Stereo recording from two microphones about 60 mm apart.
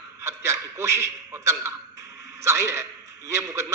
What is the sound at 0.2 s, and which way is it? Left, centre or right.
A man's voice, right.